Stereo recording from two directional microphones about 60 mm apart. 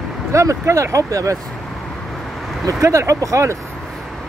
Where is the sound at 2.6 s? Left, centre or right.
Right.